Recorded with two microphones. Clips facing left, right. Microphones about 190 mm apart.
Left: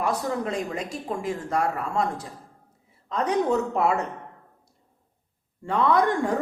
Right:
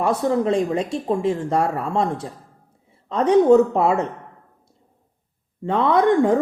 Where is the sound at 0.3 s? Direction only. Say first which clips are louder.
Right 9 dB; 30° right (ahead or behind).